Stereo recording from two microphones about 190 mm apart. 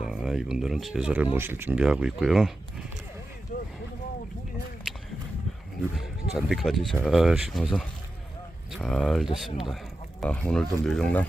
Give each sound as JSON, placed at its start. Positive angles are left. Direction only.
{"t": 0.0, "sound": "speech", "side_deg": 0}
{"t": 3.5, "sound": "vehicle", "side_deg": 45}
{"t": 6.3, "sound": "speech", "side_deg": 0}